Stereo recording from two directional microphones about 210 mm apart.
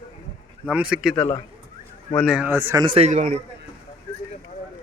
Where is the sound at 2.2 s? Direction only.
5° right (ahead or behind); by 3.4 s 35° right (ahead or behind).